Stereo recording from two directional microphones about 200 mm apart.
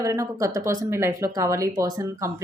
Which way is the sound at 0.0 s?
15° right (ahead or behind).